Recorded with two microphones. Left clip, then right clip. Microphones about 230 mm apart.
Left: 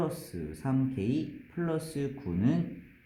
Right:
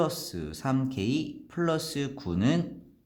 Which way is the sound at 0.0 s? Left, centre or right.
Right.